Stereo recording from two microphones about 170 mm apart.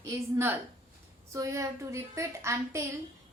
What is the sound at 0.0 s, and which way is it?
A woman's voice, 15° right (ahead or behind).